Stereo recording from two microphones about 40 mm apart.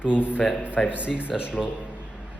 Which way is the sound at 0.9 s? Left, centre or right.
Right.